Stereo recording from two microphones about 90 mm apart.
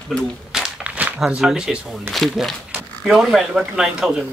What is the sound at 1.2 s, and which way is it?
Speech, 5° right (ahead or behind).